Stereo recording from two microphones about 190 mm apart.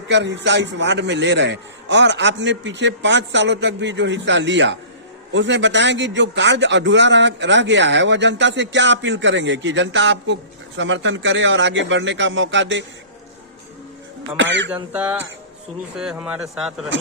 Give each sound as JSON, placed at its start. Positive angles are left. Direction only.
{"t": 0.1, "sound": "a man's voice", "side_deg": -70}
{"t": 14.3, "sound": "a man's voice", "side_deg": -75}
{"t": 14.9, "sound": "speech", "side_deg": -10}